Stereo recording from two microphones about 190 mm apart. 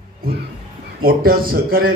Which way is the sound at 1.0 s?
50° right (ahead or behind).